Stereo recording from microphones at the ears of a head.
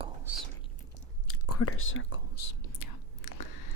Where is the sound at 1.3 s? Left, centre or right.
Left.